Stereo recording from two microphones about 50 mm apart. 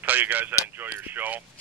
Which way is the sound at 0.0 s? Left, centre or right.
Right.